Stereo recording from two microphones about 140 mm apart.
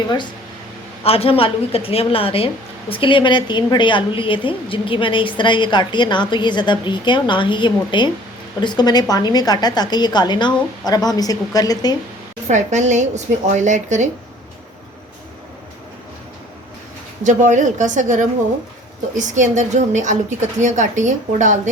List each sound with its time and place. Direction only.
1.0 s a woman's voice: 45° left (ahead or behind); by 11.9 s 25° left (ahead or behind)
12.5 s a woman's voice: 60° right (ahead or behind)
17.2 s a woman's voice: 60° right (ahead or behind)